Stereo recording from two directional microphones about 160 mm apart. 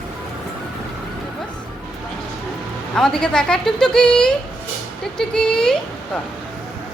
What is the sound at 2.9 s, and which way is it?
Speech, 5° left (ahead or behind).